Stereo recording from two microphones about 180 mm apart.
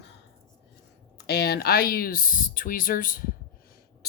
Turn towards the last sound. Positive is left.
turn(degrees=50)  # may be behind; listen again after turning